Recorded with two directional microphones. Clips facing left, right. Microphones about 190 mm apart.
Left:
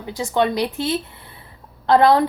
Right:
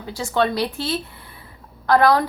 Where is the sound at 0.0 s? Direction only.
20° left (ahead or behind).